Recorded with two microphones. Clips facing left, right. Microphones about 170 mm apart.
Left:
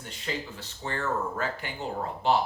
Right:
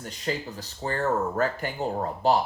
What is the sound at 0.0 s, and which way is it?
Speech, 40° right (ahead or behind).